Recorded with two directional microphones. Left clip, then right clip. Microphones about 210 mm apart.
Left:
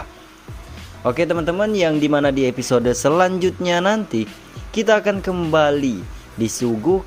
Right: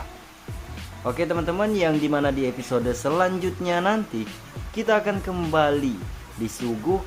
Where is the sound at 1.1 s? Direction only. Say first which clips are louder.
Left 6 dB; 30° left (ahead or behind).